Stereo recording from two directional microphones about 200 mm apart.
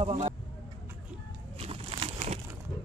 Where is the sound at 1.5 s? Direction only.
30° right (ahead or behind).